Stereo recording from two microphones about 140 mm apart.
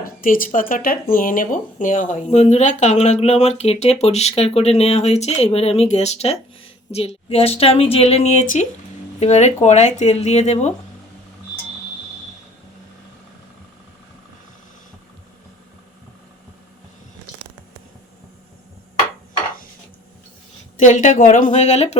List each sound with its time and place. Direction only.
0.0 s speech: 90° left; by 10.8 s 55° left (ahead or behind)
20.7 s a woman's voice: 60° left (ahead or behind)